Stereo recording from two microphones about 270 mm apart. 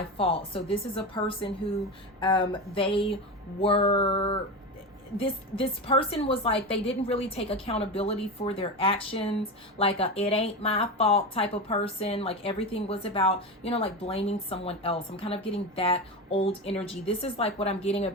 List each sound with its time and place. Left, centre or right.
0.2 s a woman's voice: left